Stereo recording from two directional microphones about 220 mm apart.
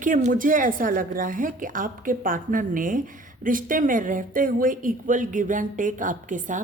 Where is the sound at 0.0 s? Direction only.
35° right (ahead or behind).